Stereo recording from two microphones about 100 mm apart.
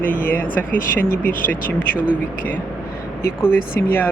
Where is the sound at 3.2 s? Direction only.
25° left (ahead or behind).